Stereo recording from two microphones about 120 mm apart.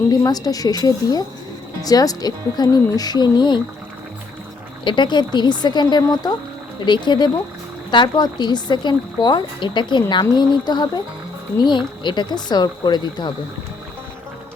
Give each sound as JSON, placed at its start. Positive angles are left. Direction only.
{"t": 0.1, "sound": "speech", "side_deg": 30}
{"t": 4.8, "sound": "speech", "side_deg": 40}